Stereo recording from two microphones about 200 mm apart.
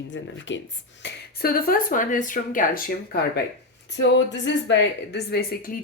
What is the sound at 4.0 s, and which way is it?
Speech, 60° left (ahead or behind).